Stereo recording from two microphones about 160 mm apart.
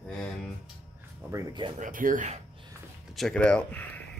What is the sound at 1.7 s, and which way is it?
Speech, 55° right (ahead or behind).